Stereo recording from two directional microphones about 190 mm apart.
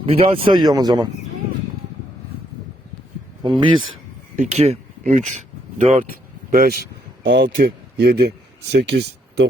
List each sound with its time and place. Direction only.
0.0 s speech: 30° right (ahead or behind)
3.4 s speech: 25° right (ahead or behind)
6.5 s speech: 50° right (ahead or behind)
7.2 s speech: 70° right (ahead or behind)
7.4 s speech: 50° right (ahead or behind)